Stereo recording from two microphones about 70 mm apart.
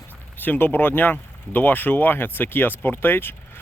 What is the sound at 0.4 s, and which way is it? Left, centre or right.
Speech, left.